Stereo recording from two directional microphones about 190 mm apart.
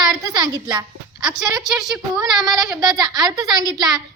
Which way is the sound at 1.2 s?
5° right (ahead or behind).